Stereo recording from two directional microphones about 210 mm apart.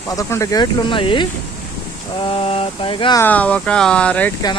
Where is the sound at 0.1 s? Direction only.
15° left (ahead or behind).